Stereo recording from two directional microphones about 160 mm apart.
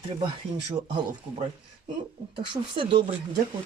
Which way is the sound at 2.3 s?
30° right (ahead or behind).